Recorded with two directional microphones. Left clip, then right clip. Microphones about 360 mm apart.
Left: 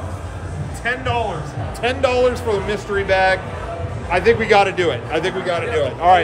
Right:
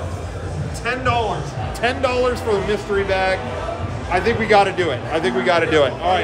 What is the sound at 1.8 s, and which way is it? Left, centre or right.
Speech, centre.